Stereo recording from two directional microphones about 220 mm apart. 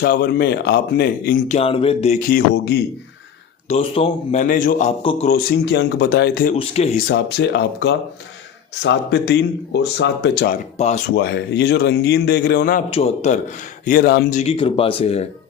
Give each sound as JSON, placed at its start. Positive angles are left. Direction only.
{"t": 0.0, "sound": "speech", "side_deg": 45}
{"t": 3.7, "sound": "speech", "side_deg": 25}
{"t": 5.5, "sound": "speech", "side_deg": 45}
{"t": 6.5, "sound": "speech", "side_deg": 30}
{"t": 7.1, "sound": "speech", "side_deg": 50}
{"t": 10.5, "sound": "speech", "side_deg": 30}
{"t": 11.1, "sound": "speech", "side_deg": 50}
{"t": 12.9, "sound": "speech", "side_deg": 30}
{"t": 13.8, "sound": "speech", "side_deg": 40}